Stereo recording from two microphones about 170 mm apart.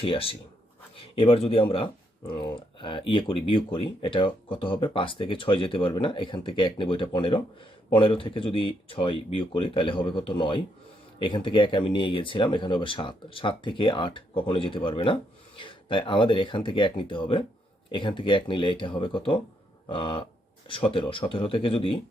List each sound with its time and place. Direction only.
0.0 s speech: 35° left (ahead or behind)